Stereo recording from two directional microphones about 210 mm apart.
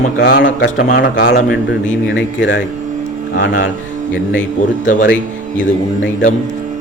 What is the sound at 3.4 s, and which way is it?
Speech, 45° left (ahead or behind).